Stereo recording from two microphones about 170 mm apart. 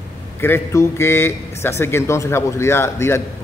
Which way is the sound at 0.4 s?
15° left (ahead or behind).